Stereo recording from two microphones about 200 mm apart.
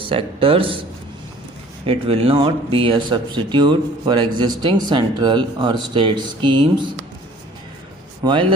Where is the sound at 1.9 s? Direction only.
30° right (ahead or behind).